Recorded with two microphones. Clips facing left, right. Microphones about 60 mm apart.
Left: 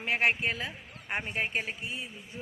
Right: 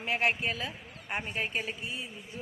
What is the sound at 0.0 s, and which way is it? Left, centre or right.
A woman's voice, left.